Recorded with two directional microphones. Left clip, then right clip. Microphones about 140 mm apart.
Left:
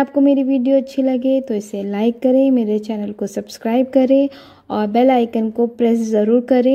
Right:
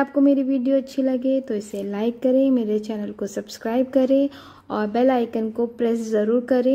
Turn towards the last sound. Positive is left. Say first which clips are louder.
# left 5 dB
turn(degrees=35)  # may be behind; listen again after turning